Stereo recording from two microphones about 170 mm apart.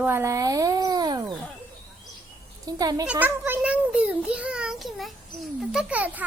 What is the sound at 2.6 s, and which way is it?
Speech, 20° right (ahead or behind).